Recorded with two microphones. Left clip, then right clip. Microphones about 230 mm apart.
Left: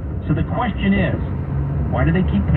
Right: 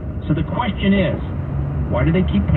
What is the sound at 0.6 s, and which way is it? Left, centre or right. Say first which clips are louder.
Speech: right 1 dB; right.